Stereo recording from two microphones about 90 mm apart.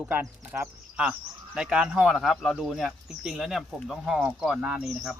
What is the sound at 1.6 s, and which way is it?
Speech, 10° right (ahead or behind).